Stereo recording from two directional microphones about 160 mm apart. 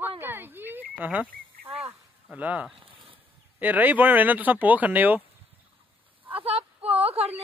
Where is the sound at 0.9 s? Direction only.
10° right (ahead or behind).